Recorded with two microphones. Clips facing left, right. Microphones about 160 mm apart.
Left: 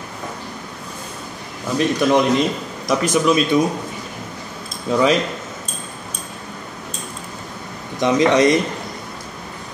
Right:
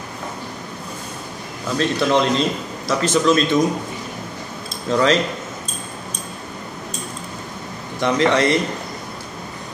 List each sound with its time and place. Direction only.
1.8 s speech: 15° left (ahead or behind)
4.8 s speech: 10° left (ahead or behind)
8.0 s speech: 15° left (ahead or behind)